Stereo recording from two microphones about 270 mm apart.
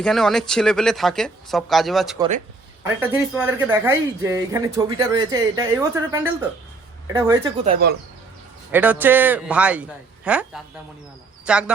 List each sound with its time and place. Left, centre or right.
0.0 s speech: centre
7.6 s speech: right
8.7 s speech: centre